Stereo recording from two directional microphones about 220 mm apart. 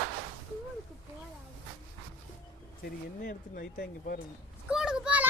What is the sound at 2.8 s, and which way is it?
Speech, 40° left (ahead or behind).